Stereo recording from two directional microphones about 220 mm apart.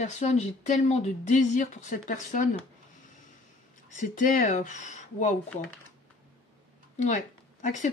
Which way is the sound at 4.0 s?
35° left (ahead or behind).